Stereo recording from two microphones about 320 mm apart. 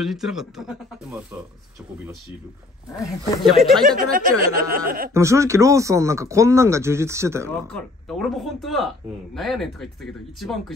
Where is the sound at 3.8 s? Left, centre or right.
Right.